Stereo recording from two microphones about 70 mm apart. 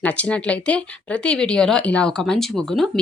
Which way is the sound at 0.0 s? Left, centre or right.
Centre.